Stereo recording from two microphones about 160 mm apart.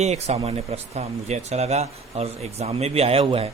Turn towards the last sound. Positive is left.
turn(degrees=-35)  # may be behind; listen again after turning